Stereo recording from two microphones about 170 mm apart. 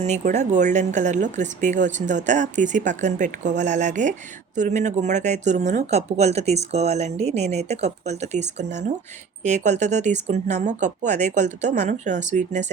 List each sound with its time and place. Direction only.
0.0 s speech: 45° right (ahead or behind)